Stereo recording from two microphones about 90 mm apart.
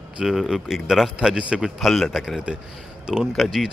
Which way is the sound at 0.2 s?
5° right (ahead or behind).